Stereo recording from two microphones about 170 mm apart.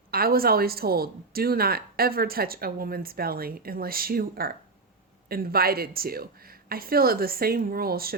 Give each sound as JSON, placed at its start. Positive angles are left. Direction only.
{"t": 0.1, "sound": "a woman's voice", "side_deg": -60}